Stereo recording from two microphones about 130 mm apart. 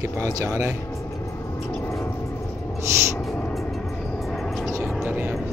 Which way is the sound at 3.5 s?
Centre (ahead or behind).